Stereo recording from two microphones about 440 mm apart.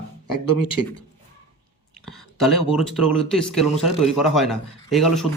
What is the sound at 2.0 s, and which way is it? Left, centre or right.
Speech, centre.